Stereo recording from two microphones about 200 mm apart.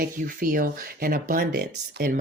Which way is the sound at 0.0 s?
45° right (ahead or behind).